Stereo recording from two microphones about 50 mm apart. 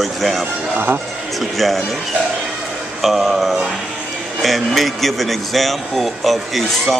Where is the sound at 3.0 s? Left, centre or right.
Centre.